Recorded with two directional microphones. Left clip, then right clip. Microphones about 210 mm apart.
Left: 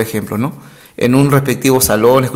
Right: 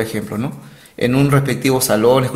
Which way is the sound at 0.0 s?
30° left (ahead or behind).